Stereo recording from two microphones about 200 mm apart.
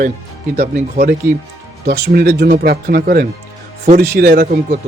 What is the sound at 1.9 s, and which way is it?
A man's voice, 55° right (ahead or behind).